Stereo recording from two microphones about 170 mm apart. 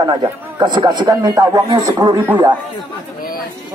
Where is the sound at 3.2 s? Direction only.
55° left (ahead or behind).